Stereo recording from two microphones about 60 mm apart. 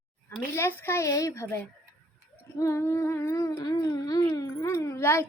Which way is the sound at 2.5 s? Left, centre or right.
Left.